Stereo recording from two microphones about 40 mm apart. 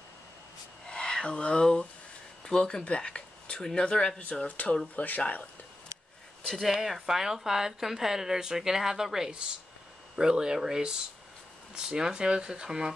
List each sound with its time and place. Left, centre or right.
0.8 s speech: left
4.2 s speech: left
4.9 s speech: left
6.4 s speech: centre
6.7 s a woman's voice: centre
10.1 s speech: right